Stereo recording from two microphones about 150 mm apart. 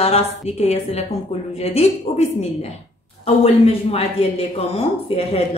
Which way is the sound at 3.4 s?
40° left (ahead or behind).